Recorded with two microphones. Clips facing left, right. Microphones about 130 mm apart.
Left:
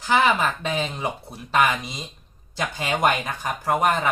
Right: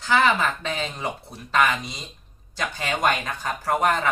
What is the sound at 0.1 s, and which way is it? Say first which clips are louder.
Speech: left 1 dB; 15° left (ahead or behind).